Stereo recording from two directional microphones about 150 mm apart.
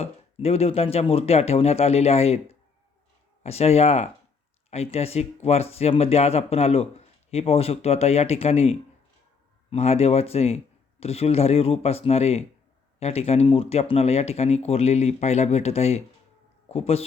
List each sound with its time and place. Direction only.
0.0 s speech: 45° left (ahead or behind)